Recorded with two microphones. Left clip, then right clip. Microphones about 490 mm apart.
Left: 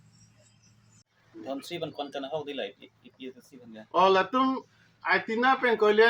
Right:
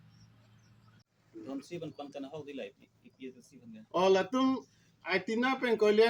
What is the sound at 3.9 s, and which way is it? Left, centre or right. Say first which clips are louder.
Speech: left 5 dB; right.